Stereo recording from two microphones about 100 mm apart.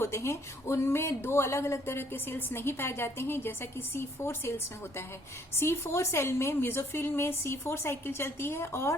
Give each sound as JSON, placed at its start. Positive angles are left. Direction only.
{"t": 0.0, "sound": "speech", "side_deg": 25}